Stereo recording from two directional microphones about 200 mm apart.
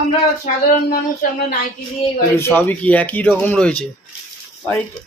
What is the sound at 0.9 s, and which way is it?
Speech, 50° left (ahead or behind).